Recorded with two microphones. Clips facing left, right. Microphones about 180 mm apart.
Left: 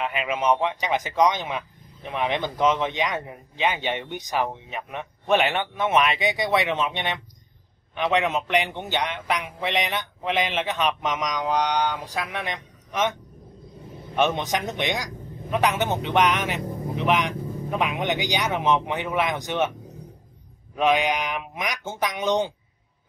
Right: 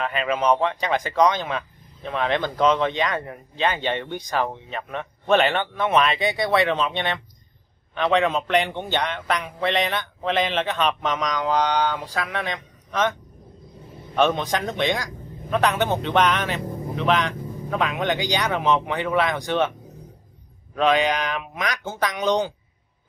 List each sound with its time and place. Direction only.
0.0 s speech: 15° left (ahead or behind)
14.1 s a man's voice: 20° left (ahead or behind)
20.7 s speech: 15° left (ahead or behind)